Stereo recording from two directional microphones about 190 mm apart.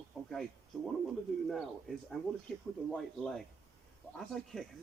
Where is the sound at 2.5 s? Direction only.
5° left (ahead or behind).